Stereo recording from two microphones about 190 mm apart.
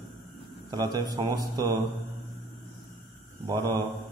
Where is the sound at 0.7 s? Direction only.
20° right (ahead or behind).